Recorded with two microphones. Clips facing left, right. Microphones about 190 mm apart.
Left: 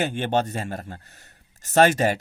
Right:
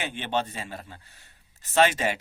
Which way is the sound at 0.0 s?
45° left (ahead or behind).